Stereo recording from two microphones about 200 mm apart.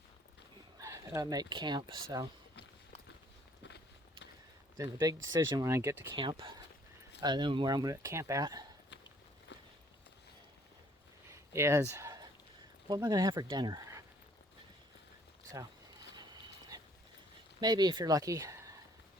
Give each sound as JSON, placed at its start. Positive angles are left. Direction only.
{"t": 0.8, "sound": "speech", "side_deg": -15}
{"t": 4.8, "sound": "speech", "side_deg": -20}
{"t": 6.1, "sound": "speech", "side_deg": -25}
{"t": 11.3, "sound": "a sound", "side_deg": -15}
{"t": 12.9, "sound": "speech", "side_deg": -20}
{"t": 15.5, "sound": "a sound", "side_deg": -20}
{"t": 17.6, "sound": "speech", "side_deg": -20}